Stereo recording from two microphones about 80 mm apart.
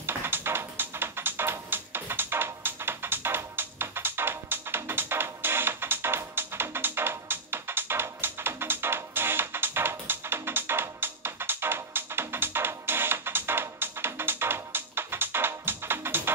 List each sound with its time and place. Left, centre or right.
0.0 s music: right